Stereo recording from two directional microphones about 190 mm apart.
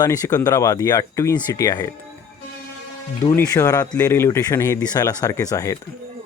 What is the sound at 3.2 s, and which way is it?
Speech, 20° left (ahead or behind).